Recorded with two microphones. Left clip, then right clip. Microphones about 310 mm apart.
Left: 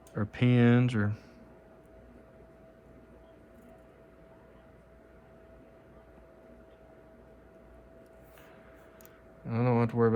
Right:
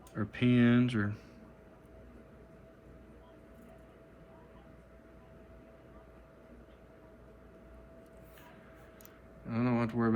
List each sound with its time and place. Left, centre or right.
0.1 s speech: centre
9.5 s speech: left